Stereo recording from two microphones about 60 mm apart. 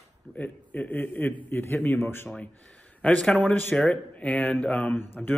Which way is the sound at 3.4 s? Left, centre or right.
Left.